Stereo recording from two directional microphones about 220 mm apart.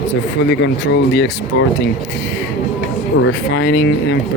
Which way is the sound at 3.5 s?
55° left (ahead or behind).